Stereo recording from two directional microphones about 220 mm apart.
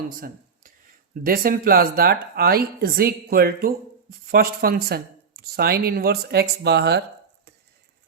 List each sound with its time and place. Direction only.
1.2 s speech: 40° right (ahead or behind)